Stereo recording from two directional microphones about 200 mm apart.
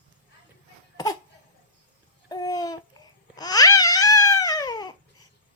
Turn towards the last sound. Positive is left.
turn(degrees=20)  # may be behind; listen again after turning